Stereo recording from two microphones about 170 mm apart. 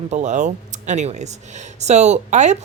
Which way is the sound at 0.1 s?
45° right (ahead or behind).